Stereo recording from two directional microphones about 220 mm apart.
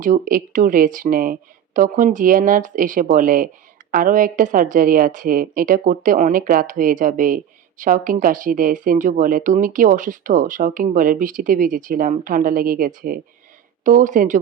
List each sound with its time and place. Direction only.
0.0 s a woman's voice: 35° right (ahead or behind)